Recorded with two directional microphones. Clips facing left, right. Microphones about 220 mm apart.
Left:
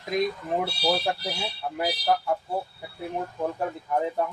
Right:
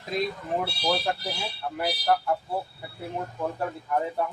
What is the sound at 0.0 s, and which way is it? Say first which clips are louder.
Speech: left 3 dB; 15° left (ahead or behind).